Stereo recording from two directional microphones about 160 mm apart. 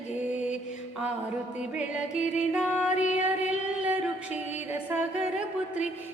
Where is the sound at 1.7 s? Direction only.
5° right (ahead or behind).